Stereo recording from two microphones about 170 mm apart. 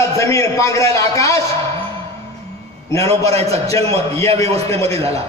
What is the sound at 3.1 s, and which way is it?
Speech, 35° right (ahead or behind).